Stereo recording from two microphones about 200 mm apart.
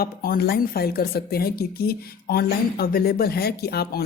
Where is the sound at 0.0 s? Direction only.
50° left (ahead or behind).